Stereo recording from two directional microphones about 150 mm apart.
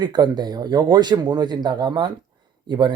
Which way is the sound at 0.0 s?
30° right (ahead or behind).